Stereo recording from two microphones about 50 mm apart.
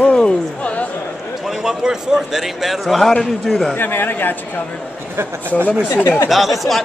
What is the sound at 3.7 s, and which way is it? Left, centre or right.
Speech, left.